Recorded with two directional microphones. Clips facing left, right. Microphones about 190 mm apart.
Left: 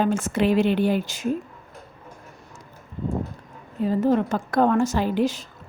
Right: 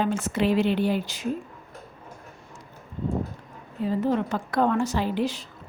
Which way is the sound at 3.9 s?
45° left (ahead or behind).